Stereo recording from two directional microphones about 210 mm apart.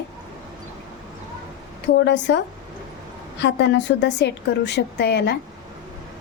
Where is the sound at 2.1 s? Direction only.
55° left (ahead or behind).